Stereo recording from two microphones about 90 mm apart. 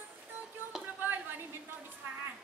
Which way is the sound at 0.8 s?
20° right (ahead or behind).